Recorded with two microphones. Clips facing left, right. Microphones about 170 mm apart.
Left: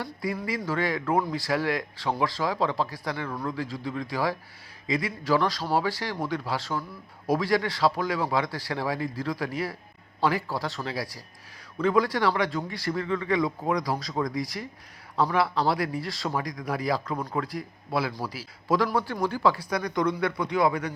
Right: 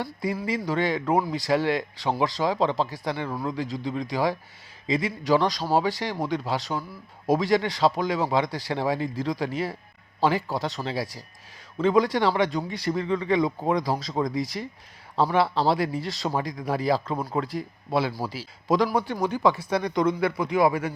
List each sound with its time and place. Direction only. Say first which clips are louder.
0.0 s speech: right 2 dB; 20° right (ahead or behind)